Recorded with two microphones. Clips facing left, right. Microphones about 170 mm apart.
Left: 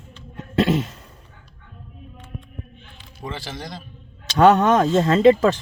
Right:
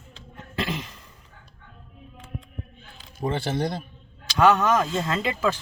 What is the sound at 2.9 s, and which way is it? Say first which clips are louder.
Speech: right 6 dB; 50° right (ahead or behind).